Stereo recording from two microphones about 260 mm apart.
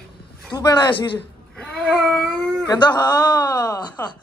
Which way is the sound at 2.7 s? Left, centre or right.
Centre.